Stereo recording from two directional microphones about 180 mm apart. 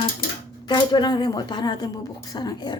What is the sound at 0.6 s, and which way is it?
A woman's voice, 25° left (ahead or behind).